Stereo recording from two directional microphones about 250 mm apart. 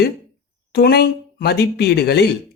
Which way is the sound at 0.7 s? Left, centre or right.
Left.